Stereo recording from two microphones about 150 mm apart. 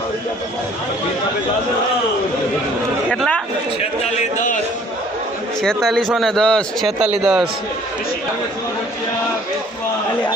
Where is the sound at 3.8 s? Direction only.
45° left (ahead or behind).